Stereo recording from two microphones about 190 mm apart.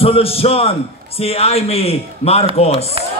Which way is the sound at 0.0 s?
30° left (ahead or behind).